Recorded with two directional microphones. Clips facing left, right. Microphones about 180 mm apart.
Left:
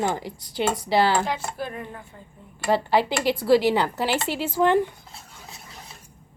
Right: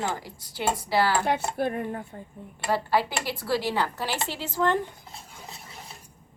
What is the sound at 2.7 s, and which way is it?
A woman's voice, 20° left (ahead or behind).